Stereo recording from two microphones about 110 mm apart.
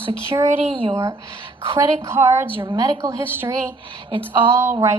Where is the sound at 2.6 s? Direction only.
40° right (ahead or behind).